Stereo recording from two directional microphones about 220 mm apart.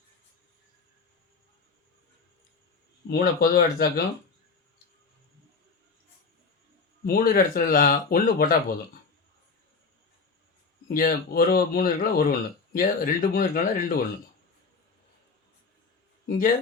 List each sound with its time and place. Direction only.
3.1 s speech: 45° left (ahead or behind)
7.0 s speech: 40° left (ahead or behind)
10.8 s speech: 45° left (ahead or behind)